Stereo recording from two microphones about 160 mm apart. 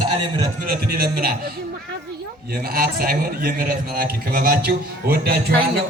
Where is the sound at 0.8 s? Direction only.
70° right (ahead or behind).